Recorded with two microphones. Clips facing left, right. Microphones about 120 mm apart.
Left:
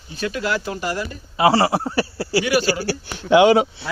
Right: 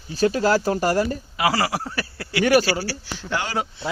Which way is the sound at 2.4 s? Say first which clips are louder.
Right 4 dB; 45° right (ahead or behind).